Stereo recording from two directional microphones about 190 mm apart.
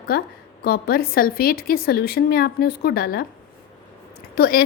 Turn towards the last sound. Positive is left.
turn(degrees=55)  # may be behind; listen again after turning